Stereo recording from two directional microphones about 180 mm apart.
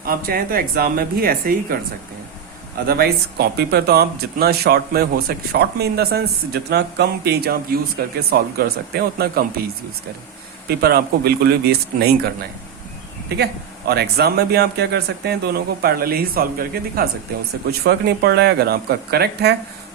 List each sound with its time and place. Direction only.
0.0 s speech: 55° right (ahead or behind)
2.8 s speech: 60° right (ahead or behind)
10.7 s speech: 60° right (ahead or behind)
13.2 s speech: 60° right (ahead or behind)